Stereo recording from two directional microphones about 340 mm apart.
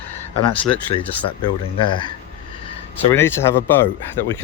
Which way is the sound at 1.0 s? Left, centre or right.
Centre.